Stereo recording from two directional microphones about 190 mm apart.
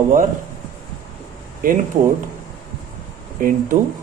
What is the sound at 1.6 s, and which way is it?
Speech, 45° right (ahead or behind).